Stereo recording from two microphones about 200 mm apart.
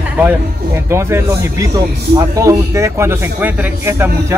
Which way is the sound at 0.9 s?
15° right (ahead or behind).